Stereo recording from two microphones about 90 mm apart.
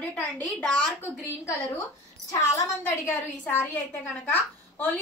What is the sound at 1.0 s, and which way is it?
A woman's voice, 25° left (ahead or behind).